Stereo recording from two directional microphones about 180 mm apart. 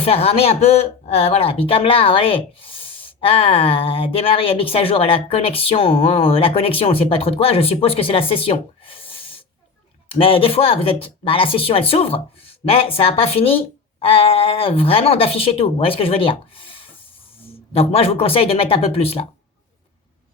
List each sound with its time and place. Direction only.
0.0 s speech: 35° left (ahead or behind)
10.1 s speech: 30° left (ahead or behind)